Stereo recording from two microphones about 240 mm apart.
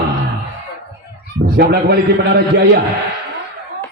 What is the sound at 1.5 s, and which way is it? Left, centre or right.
A man's voice, right.